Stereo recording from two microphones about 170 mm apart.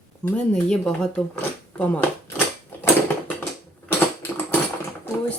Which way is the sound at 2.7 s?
10° left (ahead or behind).